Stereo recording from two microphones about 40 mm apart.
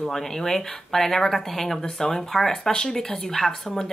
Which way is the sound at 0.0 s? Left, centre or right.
Centre.